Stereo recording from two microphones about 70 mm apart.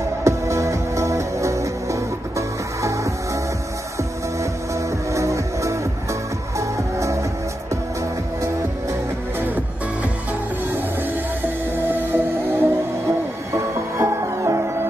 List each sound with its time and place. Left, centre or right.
0.2 s music: right
5.1 s music: right
11.9 s music: right
13.9 s music: right